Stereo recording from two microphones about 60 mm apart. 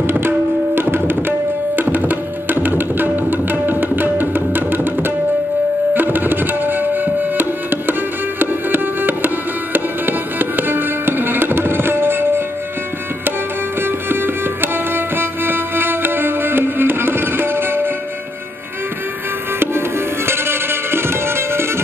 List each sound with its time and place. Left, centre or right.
0.7 s tabla: right
8.4 s music: right
14.0 s music: right
20.2 s music: right